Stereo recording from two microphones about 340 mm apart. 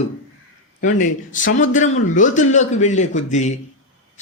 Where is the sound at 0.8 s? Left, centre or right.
Left.